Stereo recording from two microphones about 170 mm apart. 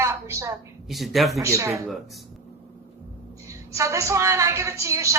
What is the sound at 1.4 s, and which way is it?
Speech, 15° right (ahead or behind).